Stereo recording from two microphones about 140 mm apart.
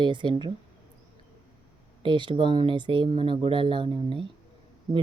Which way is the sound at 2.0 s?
35° right (ahead or behind).